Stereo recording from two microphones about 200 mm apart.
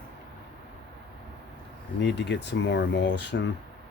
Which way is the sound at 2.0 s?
60° left (ahead or behind).